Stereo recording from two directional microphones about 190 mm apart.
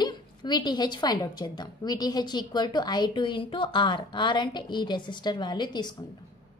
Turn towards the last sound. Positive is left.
turn(degrees=20)  # may be behind; listen again after turning